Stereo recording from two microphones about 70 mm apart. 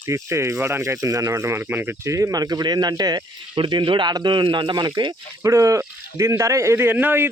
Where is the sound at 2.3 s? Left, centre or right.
Right.